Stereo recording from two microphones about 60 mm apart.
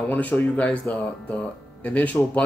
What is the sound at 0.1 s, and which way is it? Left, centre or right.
Speech, left.